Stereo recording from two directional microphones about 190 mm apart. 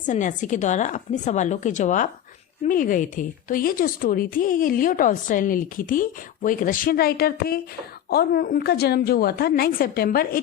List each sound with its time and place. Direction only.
0.0 s a woman's voice: 40° left (ahead or behind)